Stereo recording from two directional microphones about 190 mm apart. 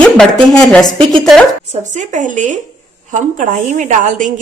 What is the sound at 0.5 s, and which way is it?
Speech, 5° left (ahead or behind).